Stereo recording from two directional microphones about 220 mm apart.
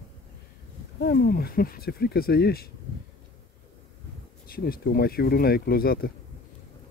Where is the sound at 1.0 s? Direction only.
45° left (ahead or behind).